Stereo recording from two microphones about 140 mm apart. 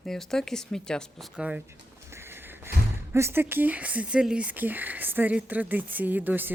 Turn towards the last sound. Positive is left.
turn(degrees=-15)  # may be behind; listen again after turning